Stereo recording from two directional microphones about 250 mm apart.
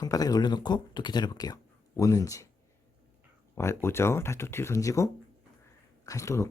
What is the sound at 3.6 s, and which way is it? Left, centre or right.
Speech, centre.